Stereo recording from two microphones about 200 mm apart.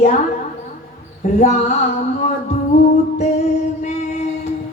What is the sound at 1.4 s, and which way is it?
Speech, 35° left (ahead or behind).